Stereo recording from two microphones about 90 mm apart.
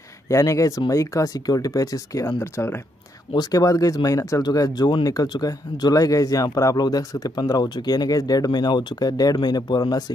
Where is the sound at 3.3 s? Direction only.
50° left (ahead or behind).